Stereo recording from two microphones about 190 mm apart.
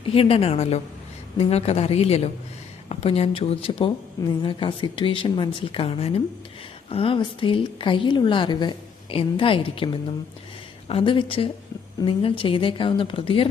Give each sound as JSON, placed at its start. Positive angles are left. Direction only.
{"t": 0.0, "sound": "a woman's voice", "side_deg": 30}